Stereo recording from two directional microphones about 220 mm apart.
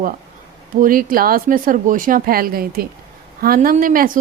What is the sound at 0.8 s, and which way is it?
Speech, 40° right (ahead or behind).